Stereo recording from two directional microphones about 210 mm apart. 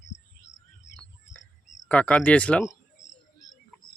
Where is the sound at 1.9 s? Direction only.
5° left (ahead or behind).